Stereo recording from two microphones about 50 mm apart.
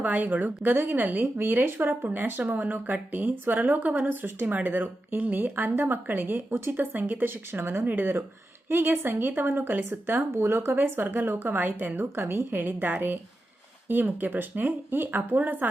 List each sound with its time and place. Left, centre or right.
0.0 s speech: right
1.4 s speech: right
10.2 s speech: right
12.5 s speech: right